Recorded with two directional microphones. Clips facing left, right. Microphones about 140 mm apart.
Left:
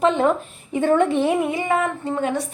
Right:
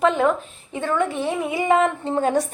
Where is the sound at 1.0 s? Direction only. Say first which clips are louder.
Left 5 dB; 20° left (ahead or behind).